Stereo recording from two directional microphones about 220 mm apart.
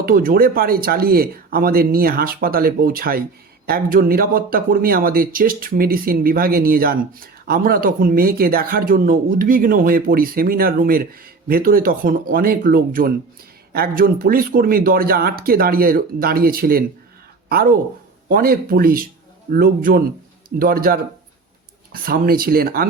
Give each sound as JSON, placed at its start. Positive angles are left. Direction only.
{"t": 0.0, "sound": "speech", "side_deg": -40}
{"t": 18.3, "sound": "speech", "side_deg": -45}